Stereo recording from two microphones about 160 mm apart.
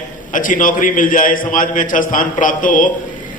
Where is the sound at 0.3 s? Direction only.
55° left (ahead or behind).